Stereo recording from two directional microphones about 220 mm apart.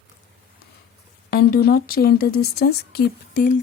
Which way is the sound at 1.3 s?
45° left (ahead or behind).